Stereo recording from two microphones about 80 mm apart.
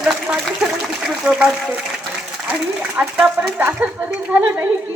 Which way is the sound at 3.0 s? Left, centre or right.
Centre.